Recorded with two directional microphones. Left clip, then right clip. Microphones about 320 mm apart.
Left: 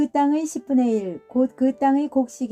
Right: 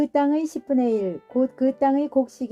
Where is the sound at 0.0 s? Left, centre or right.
Left.